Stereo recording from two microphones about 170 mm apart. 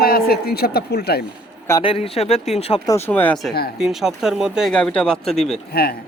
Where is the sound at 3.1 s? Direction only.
10° left (ahead or behind).